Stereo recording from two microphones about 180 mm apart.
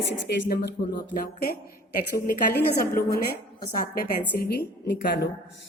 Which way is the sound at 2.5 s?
55° left (ahead or behind).